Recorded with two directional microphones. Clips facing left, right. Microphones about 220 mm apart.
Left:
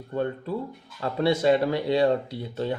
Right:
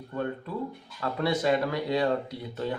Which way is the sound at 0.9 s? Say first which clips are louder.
Left 4 dB; 25° left (ahead or behind).